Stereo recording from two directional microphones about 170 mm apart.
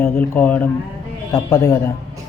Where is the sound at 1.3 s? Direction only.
20° left (ahead or behind).